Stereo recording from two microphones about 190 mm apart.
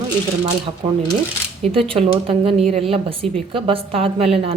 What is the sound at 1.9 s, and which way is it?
A woman's voice, 30° right (ahead or behind).